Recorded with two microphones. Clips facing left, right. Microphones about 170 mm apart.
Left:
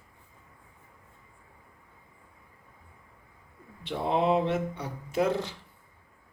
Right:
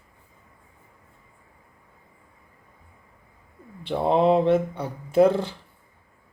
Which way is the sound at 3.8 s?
35° right (ahead or behind).